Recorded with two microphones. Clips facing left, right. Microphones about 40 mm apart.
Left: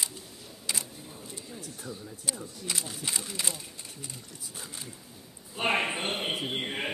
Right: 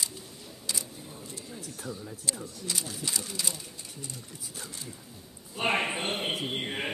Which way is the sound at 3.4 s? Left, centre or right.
Left.